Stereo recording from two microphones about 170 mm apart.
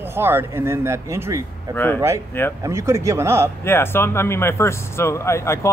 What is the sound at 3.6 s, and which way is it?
Speech, 15° left (ahead or behind).